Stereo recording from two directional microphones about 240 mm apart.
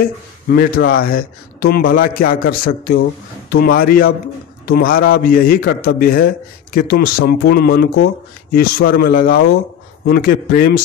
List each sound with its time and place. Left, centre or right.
0.0 s a man's voice: left